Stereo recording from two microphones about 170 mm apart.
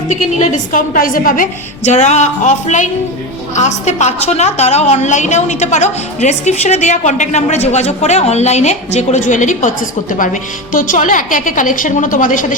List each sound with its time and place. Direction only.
0.3 s a woman's voice: 55° left (ahead or behind)